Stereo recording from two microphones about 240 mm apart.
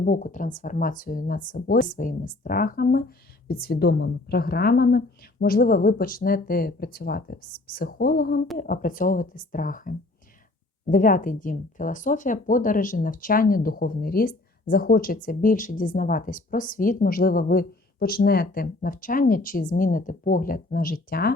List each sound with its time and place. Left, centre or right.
0.0 s speech: left